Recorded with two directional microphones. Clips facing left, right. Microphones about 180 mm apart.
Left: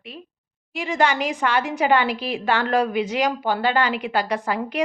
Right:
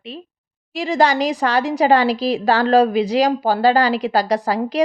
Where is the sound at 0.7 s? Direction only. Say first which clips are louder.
Right 4 dB; 35° right (ahead or behind).